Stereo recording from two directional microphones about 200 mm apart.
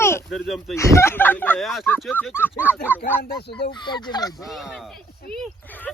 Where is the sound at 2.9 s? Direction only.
10° right (ahead or behind).